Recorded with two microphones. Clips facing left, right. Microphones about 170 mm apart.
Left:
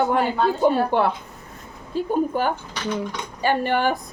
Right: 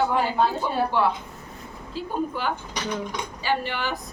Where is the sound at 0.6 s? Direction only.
55° left (ahead or behind).